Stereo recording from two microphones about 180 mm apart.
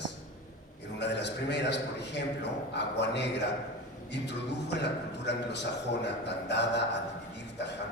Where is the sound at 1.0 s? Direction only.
75° left (ahead or behind).